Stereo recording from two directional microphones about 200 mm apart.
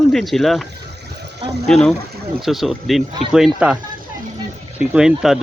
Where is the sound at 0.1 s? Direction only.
Centre (ahead or behind).